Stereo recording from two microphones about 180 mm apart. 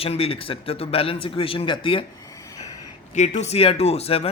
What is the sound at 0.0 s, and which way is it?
A man's voice, 30° left (ahead or behind).